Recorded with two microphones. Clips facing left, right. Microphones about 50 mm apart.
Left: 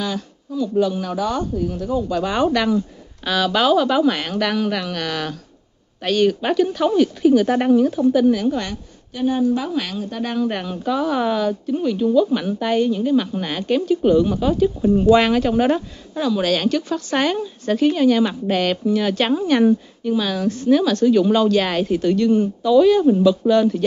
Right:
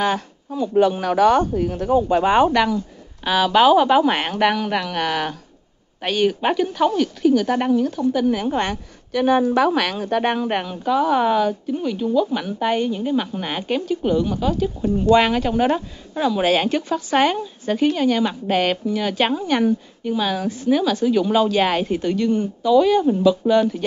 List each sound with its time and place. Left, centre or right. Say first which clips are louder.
0.0 s speech: right 5 dB; right
2.4 s speech: even; centre
6.9 s speech: left 3 dB; centre
8.3 s speech: left 3 dB; centre
9.1 s speech: right 4 dB; right
9.7 s speech: right 5 dB; right
10.4 s speech: even; centre
10.7 s speech: right 2 dB; centre
16.2 s speech: right 1 dB; centre
16.9 s speech: right 2 dB; centre